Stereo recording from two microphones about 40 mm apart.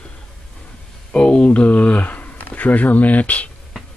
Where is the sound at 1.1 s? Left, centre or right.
Left.